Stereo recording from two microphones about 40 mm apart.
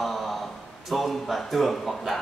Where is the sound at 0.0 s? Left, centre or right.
Centre.